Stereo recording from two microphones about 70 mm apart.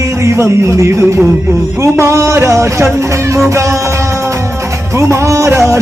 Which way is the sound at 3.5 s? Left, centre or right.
Right.